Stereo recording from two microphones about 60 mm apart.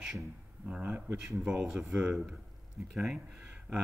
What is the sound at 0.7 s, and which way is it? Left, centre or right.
Speech, centre.